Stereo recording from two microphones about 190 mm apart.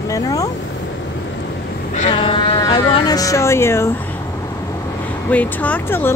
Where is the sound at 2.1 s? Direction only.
25° left (ahead or behind).